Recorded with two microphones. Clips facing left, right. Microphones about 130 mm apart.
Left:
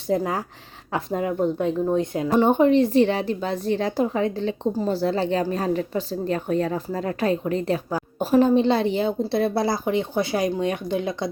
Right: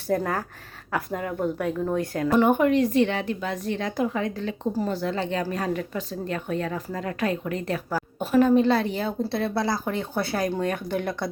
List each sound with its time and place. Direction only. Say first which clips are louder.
0.1 s speech: left 2 dB; 15° left (ahead or behind)
0.9 s a woman's voice: left 4 dB; 25° left (ahead or behind)
10.0 s a woman's voice: left 3 dB; 20° left (ahead or behind)